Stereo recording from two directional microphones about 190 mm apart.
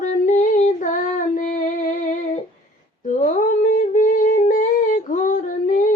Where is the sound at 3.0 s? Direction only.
40° left (ahead or behind).